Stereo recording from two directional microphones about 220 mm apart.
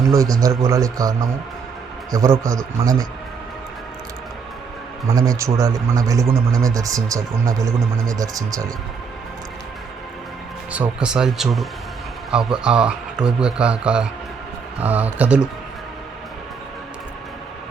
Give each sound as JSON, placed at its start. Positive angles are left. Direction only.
{"t": 0.1, "sound": "speech", "side_deg": -15}
{"t": 5.0, "sound": "speech", "side_deg": -15}
{"t": 10.7, "sound": "speech", "side_deg": -5}